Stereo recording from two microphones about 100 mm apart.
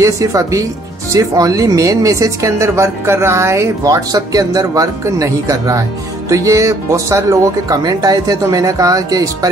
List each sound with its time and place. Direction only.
0.0 s a woman's voice: 35° right (ahead or behind)